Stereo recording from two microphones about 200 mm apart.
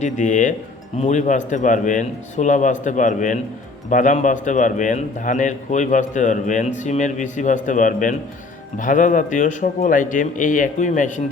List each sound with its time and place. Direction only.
0.0 s a man's voice: 40° left (ahead or behind)